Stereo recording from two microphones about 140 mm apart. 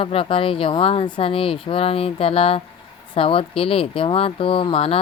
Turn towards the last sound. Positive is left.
turn(degrees=45)  # may be behind; listen again after turning